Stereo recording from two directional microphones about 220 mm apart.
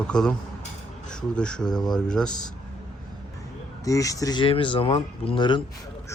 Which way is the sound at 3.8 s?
15° left (ahead or behind).